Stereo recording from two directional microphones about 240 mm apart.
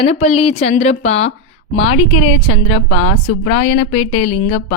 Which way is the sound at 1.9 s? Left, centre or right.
Left.